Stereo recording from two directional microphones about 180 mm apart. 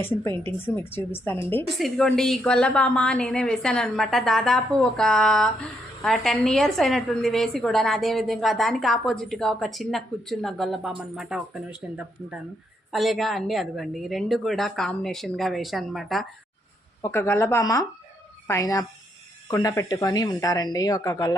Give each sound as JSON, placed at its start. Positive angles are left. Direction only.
{"t": 0.0, "sound": "speech", "side_deg": 10}
{"t": 1.8, "sound": "a woman's voice", "side_deg": 5}
{"t": 17.0, "sound": "speech", "side_deg": 15}